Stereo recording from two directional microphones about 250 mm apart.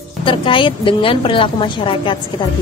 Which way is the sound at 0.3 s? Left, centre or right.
Centre.